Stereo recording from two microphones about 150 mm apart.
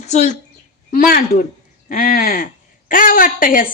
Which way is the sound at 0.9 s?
70° left (ahead or behind).